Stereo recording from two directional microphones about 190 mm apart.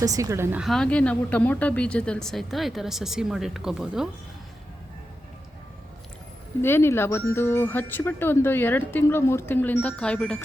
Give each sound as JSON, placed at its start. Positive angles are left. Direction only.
{"t": 0.0, "sound": "a woman's voice", "side_deg": -15}
{"t": 0.6, "sound": "speech", "side_deg": 0}
{"t": 6.6, "sound": "speech", "side_deg": 10}